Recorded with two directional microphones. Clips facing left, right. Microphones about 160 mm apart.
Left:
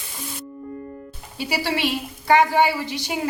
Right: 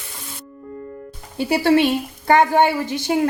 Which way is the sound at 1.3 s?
50° right (ahead or behind).